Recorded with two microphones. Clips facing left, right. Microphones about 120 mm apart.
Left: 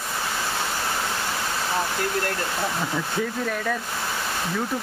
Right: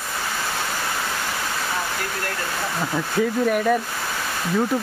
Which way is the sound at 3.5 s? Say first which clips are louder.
Right 7 dB; 15° right (ahead or behind).